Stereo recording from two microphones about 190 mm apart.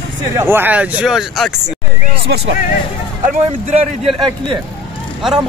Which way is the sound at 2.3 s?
60° right (ahead or behind).